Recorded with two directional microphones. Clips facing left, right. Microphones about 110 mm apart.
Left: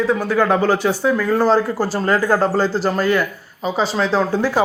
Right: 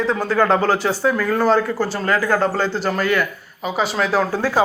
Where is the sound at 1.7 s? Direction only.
40° left (ahead or behind).